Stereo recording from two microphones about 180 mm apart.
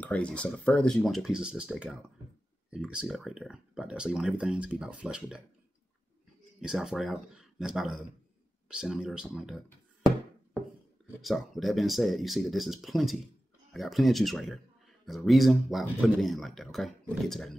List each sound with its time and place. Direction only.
0.0 s speech: 5° left (ahead or behind)
6.6 s speech: 5° right (ahead or behind)
11.1 s speech: centre (ahead or behind)